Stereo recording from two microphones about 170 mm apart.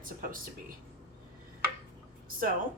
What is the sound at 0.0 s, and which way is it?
Speech, 55° right (ahead or behind).